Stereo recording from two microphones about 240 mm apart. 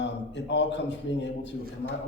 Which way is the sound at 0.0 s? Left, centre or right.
Left.